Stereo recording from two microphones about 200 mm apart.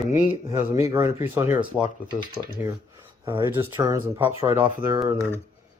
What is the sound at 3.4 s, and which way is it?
Speech, 15° right (ahead or behind).